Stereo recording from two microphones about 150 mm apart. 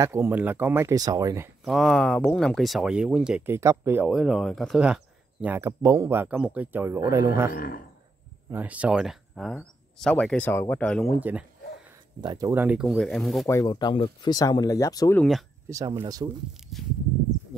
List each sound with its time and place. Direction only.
0.0 s speech: 20° right (ahead or behind)
1.6 s speech: centre (ahead or behind); by 4.1 s 15° right (ahead or behind)
4.1 s a man's voice: centre (ahead or behind); by 7.5 s 15° right (ahead or behind)
7.5 s speech: 75° left (ahead or behind)
8.5 s speech: 10° right (ahead or behind); by 11.1 s 10° left (ahead or behind)
11.1 s speech: 10° right (ahead or behind)
12.2 s a man's voice: 25° right (ahead or behind)
12.5 s speech: 10° right (ahead or behind)
12.8 s speech: centre (ahead or behind)
13.5 s speech: 20° left (ahead or behind)
15.1 s speech: centre (ahead or behind)
16.0 s a man's voice: 25° right (ahead or behind)